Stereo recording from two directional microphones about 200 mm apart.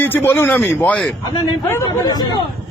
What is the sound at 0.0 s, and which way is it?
Speech, 10° left (ahead or behind).